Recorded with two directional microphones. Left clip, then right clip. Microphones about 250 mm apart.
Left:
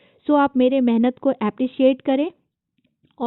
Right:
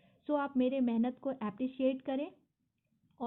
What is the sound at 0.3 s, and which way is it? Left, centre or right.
A woman's voice, left.